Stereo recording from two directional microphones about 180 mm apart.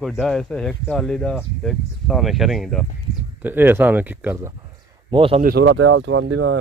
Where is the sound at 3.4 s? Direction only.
10° right (ahead or behind).